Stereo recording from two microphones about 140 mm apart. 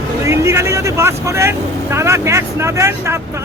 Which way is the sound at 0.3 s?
20° right (ahead or behind).